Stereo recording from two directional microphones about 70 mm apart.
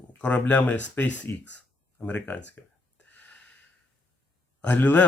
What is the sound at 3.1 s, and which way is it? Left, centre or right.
Gasp, left.